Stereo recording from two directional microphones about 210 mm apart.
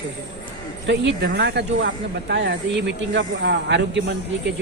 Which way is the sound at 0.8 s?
55° right (ahead or behind).